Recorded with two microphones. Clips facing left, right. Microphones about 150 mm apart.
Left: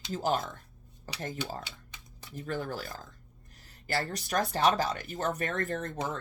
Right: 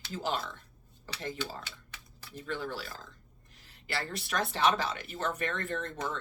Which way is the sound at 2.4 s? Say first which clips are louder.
Left 2 dB; 45° left (ahead or behind).